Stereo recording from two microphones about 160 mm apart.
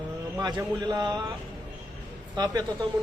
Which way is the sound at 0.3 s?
25° right (ahead or behind).